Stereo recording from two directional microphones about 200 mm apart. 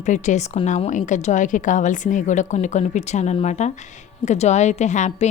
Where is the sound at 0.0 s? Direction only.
40° left (ahead or behind).